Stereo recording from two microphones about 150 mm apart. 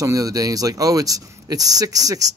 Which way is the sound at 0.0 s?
25° right (ahead or behind).